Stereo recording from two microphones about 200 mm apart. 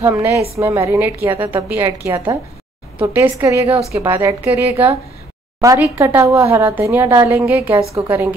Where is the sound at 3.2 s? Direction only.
15° right (ahead or behind).